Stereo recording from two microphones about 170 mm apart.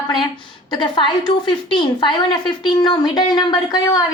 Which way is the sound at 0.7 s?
25° left (ahead or behind).